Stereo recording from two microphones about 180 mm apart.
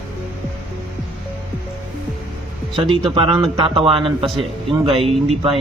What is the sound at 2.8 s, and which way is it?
Speech, 30° right (ahead or behind).